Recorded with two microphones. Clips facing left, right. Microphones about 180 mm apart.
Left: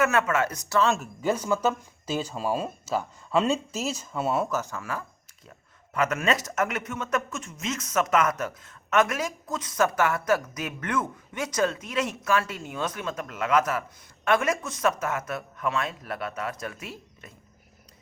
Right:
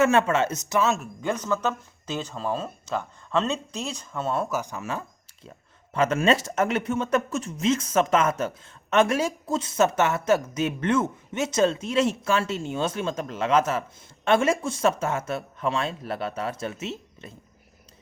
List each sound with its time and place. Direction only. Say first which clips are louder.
0.0 s speech: right 3 dB; 30° right (ahead or behind)
0.8 s speech: even; centre (ahead or behind)
4.5 s speech: right 1 dB; 15° right (ahead or behind)